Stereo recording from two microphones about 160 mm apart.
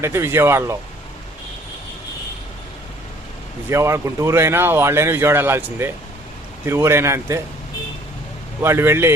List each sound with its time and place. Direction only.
0.0 s speech: 15° right (ahead or behind)
3.7 s speech: 15° right (ahead or behind)
8.6 s speech: 15° right (ahead or behind)